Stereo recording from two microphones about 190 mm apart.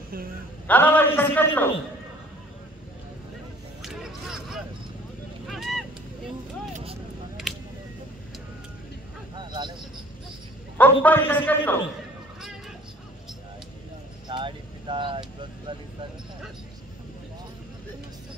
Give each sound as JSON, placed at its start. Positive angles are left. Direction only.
{"t": 0.7, "sound": "a man's voice", "side_deg": 10}
{"t": 3.8, "sound": "a sound", "side_deg": 0}
{"t": 6.7, "sound": "vehicle", "side_deg": -30}
{"t": 7.5, "sound": "a sound", "side_deg": 0}
{"t": 9.3, "sound": "vehicle", "side_deg": -25}
{"t": 10.8, "sound": "a man's voice", "side_deg": 10}
{"t": 14.2, "sound": "vehicle", "side_deg": -25}